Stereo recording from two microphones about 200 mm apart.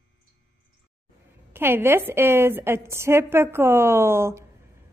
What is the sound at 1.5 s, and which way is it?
Speech, 10° right (ahead or behind).